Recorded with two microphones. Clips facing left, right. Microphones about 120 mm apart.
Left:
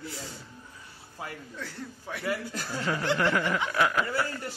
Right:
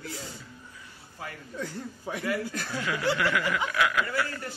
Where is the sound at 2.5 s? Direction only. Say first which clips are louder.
Left 1 dB; 35° left (ahead or behind).